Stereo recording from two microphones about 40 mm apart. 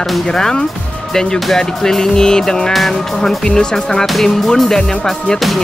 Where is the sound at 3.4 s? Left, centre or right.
Left.